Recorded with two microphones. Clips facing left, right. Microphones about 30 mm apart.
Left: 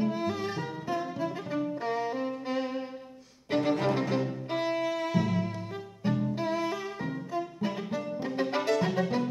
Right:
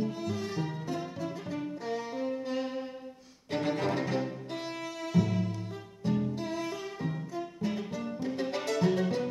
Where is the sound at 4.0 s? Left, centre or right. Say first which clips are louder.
Left 2 dB; centre.